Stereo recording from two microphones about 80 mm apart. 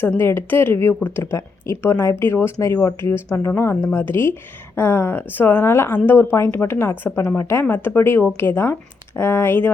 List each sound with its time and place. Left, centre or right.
0.2 s speech: left